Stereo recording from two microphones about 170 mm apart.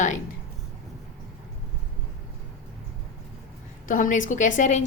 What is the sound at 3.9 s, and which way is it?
Speech, 50° left (ahead or behind).